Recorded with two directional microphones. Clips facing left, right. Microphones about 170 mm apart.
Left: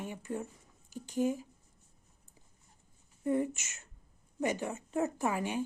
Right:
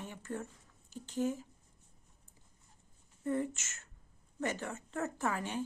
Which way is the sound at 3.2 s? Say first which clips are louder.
Left 4 dB; 15° left (ahead or behind).